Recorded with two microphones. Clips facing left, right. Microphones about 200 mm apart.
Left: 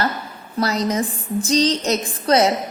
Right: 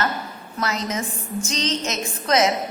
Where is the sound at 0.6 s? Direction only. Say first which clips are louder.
Left 6 dB; 35° left (ahead or behind).